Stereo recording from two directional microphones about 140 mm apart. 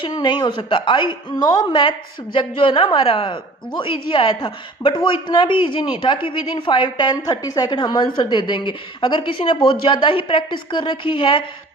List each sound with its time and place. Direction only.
0.0 s a woman's voice: 30° left (ahead or behind)